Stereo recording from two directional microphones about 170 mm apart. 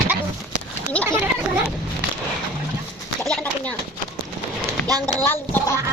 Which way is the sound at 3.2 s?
5° left (ahead or behind).